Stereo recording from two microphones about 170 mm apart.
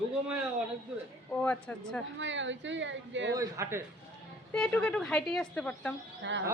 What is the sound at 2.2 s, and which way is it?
Speech, 90° right.